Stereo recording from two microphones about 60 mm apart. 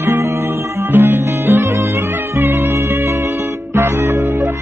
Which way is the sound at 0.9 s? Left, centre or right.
Right.